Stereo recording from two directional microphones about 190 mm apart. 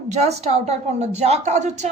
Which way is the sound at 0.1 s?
35° right (ahead or behind).